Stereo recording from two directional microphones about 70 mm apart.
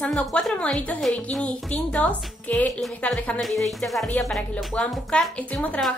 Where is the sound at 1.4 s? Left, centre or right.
Centre.